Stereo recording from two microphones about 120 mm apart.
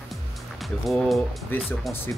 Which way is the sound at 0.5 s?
Centre (ahead or behind).